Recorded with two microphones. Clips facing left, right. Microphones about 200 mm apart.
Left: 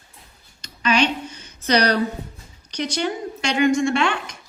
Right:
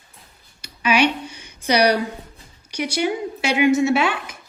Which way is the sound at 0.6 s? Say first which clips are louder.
Right 2 dB; 10° right (ahead or behind).